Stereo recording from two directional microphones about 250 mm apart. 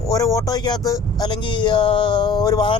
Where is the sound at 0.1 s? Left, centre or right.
Centre.